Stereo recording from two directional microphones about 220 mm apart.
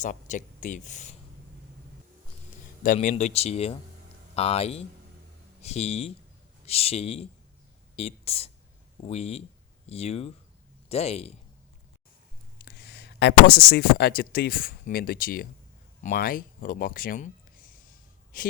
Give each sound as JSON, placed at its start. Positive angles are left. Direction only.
{"t": 0.0, "sound": "speech", "side_deg": 35}
{"t": 2.8, "sound": "speech", "side_deg": 35}
{"t": 12.6, "sound": "speech", "side_deg": 50}